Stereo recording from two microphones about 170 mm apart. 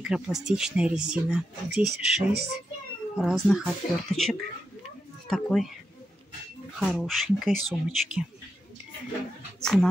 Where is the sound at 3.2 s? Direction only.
Centre (ahead or behind).